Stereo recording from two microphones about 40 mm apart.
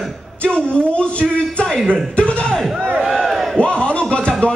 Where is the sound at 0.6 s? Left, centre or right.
Centre.